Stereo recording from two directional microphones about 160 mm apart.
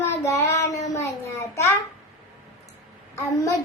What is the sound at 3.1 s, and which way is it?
Speech, 20° left (ahead or behind).